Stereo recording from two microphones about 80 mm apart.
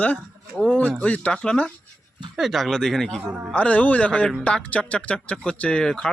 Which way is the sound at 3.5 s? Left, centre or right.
Centre.